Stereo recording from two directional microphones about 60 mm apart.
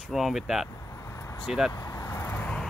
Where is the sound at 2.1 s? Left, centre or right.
Left.